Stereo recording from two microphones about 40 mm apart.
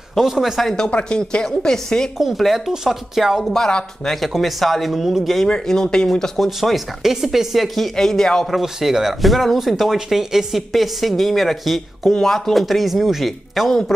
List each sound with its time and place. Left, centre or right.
0.2 s speech: centre
0.7 s speech: left
2.1 s speech: centre
3.5 s speech: centre
4.4 s speech: centre
5.5 s speech: centre
6.4 s speech: centre
7.9 s speech: centre
8.5 s speech: centre
12.1 s speech: centre
12.5 s speech: centre